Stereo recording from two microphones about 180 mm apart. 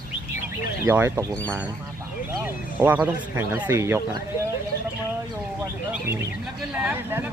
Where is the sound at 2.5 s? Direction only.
10° right (ahead or behind).